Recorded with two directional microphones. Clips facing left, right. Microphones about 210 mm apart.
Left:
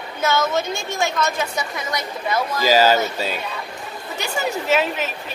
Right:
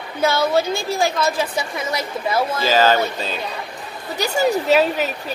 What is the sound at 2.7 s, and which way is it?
Speech, 10° left (ahead or behind).